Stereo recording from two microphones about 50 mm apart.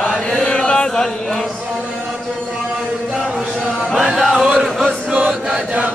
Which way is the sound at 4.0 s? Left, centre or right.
Centre.